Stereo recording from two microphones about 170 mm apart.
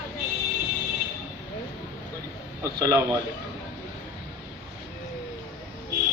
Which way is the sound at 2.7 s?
20° right (ahead or behind).